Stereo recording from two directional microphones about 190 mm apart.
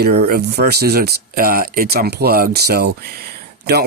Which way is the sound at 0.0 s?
55° right (ahead or behind).